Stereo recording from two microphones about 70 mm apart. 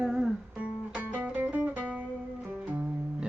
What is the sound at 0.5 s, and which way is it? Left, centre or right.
Music, right.